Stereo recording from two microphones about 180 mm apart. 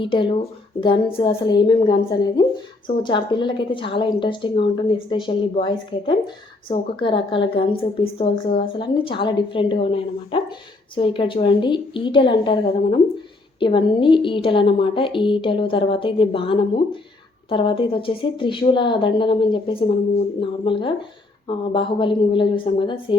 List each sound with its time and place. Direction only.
0.0 s a woman's voice: 30° left (ahead or behind)